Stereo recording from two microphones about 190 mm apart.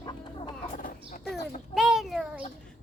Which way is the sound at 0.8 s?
45° left (ahead or behind).